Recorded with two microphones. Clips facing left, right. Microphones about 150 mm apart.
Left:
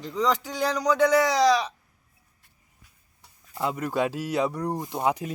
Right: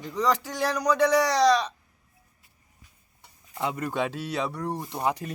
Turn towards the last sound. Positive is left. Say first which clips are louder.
# left 2 dB
turn(degrees=10)  # may be behind; listen again after turning